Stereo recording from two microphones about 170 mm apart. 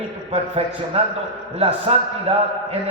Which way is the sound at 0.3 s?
35° right (ahead or behind).